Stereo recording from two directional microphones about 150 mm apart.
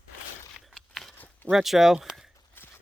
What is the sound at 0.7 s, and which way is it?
Scissors, centre (ahead or behind).